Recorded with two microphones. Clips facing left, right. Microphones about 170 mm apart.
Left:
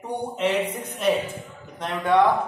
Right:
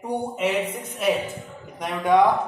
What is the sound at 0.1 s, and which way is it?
A man's voice, 10° right (ahead or behind).